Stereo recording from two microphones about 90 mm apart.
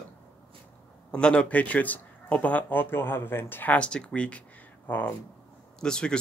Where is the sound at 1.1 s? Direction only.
10° left (ahead or behind).